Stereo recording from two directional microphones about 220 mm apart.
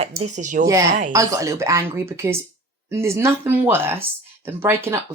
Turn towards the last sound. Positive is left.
turn(degrees=-10)  # may be behind; listen again after turning